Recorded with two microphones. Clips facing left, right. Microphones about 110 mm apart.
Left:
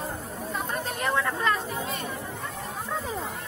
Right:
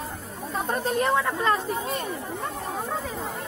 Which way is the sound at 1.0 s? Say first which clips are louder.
Right 1 dB; 20° right (ahead or behind).